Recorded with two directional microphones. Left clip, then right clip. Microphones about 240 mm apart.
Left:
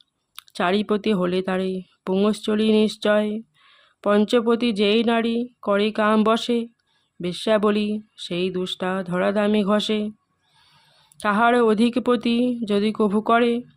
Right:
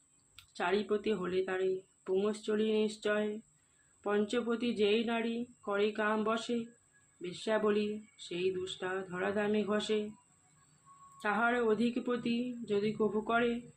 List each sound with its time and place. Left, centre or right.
0.3 s speech: left
11.2 s speech: left